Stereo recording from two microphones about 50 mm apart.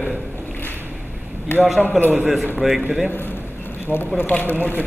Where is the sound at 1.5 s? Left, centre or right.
Left.